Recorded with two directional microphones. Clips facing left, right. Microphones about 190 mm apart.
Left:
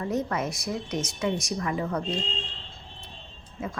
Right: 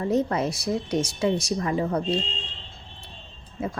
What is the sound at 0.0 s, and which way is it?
A woman's voice, 30° right (ahead or behind).